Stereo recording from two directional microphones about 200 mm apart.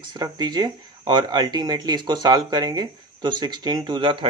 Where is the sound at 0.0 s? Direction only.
20° right (ahead or behind).